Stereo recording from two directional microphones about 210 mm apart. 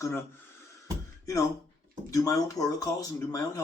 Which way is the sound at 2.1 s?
15° left (ahead or behind).